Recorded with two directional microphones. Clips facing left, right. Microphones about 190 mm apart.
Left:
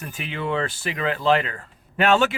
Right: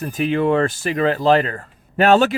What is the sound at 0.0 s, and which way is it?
Speech, 40° right (ahead or behind).